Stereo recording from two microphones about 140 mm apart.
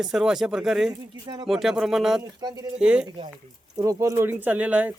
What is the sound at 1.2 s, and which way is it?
Speech, 30° right (ahead or behind).